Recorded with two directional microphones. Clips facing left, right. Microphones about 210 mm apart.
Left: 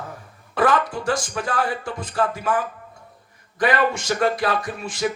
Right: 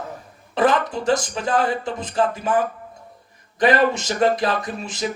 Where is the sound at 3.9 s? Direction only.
20° right (ahead or behind).